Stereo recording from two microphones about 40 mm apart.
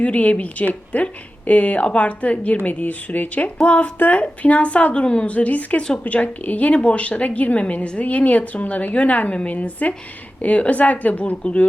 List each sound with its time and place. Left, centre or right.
0.0 s a woman's voice: left
2.6 s speech: left
3.6 s a woman's voice: left